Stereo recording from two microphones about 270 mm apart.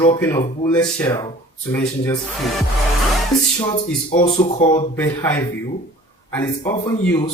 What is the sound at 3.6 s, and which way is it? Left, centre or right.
Speech, centre.